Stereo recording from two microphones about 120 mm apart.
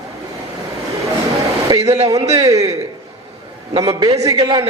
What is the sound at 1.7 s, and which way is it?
Speech, 45° right (ahead or behind).